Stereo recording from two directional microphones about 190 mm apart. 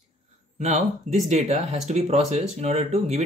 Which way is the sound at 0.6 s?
40° right (ahead or behind).